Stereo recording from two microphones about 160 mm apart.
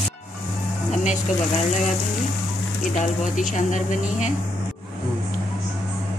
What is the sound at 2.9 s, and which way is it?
Speech, 50° left (ahead or behind).